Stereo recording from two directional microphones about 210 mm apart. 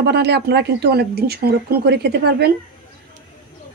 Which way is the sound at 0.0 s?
50° right (ahead or behind).